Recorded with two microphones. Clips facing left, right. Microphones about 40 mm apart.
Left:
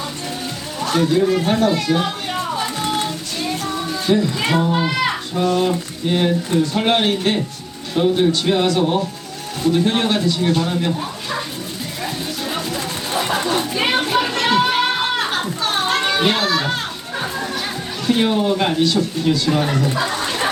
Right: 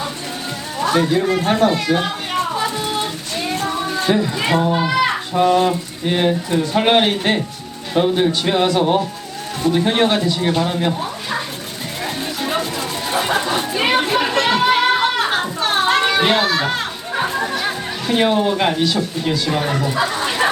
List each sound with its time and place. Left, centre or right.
0.8 s a man's voice: centre
3.6 s music: right
4.4 s a man's voice: centre
5.3 s a man's voice: right
12.0 s music: right
13.1 s a sound: centre
15.3 s children playing: right
17.2 s music: right
18.0 s a man's voice: centre
20.0 s a sound: centre